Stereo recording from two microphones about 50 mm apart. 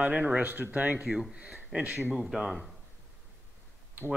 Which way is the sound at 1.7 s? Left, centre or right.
Right.